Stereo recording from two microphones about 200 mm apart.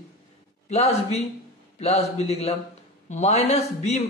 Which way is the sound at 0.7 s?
30° left (ahead or behind).